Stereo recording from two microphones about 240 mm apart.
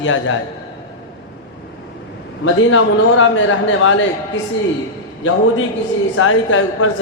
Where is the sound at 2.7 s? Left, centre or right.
Left.